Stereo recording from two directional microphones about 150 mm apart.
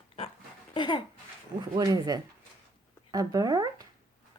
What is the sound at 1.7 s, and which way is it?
Speech, 25° right (ahead or behind).